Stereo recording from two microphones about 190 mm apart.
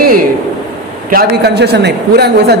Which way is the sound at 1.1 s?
55° right (ahead or behind).